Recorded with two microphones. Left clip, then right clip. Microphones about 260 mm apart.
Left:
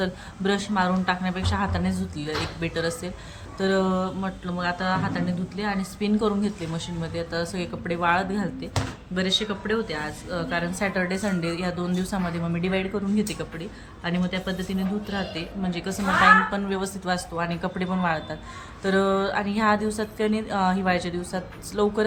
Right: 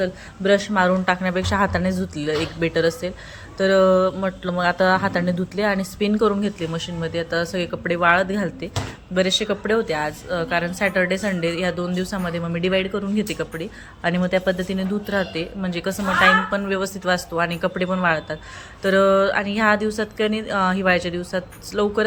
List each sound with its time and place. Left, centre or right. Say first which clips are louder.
0.0 s speech: right 5 dB; centre